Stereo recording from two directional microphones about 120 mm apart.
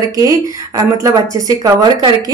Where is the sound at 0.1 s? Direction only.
30° right (ahead or behind).